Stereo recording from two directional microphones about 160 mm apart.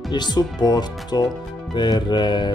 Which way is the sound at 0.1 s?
25° left (ahead or behind).